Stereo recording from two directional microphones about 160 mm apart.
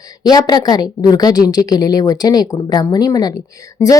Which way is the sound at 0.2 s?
25° left (ahead or behind).